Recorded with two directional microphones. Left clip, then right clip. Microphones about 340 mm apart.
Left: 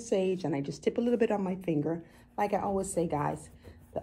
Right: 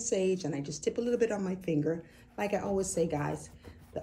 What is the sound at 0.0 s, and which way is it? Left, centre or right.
Speech, centre.